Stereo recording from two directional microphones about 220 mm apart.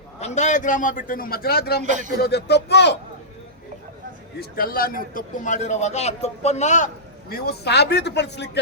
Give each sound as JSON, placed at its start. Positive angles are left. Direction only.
{"t": 0.2, "sound": "a man's voice", "side_deg": 30}
{"t": 1.8, "sound": "speech", "side_deg": -35}
{"t": 2.2, "sound": "a man's voice", "side_deg": 50}
{"t": 4.4, "sound": "a man's voice", "side_deg": 40}